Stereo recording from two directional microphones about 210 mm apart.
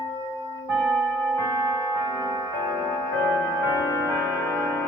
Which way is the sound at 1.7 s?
15° right (ahead or behind).